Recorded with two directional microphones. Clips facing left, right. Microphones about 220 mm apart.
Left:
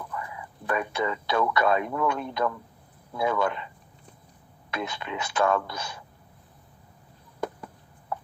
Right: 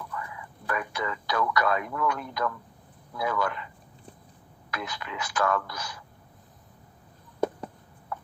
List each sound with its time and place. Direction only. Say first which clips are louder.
0.1 s speech: left 2 dB; 25° left (ahead or behind)
4.7 s speech: left 4 dB; 25° left (ahead or behind)